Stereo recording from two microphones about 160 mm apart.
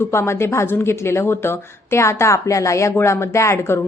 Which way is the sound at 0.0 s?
15° left (ahead or behind).